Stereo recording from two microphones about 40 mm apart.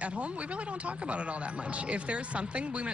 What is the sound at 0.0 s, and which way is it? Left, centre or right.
A man's voice, right.